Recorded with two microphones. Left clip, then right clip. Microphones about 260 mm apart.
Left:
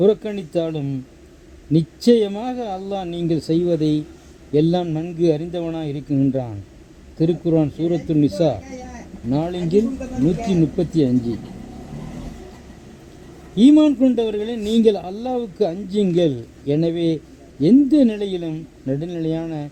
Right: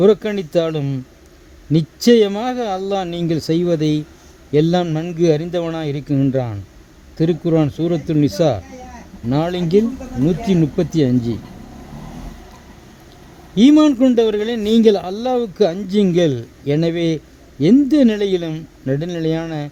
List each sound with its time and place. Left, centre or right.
0.0 s a man's voice: right
13.6 s a man's voice: right